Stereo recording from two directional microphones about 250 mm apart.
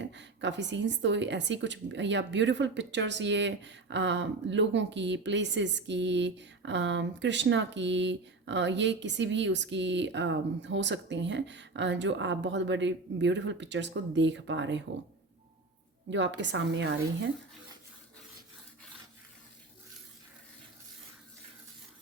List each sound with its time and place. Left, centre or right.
0.0 s a woman's voice: right
16.0 s a woman's voice: right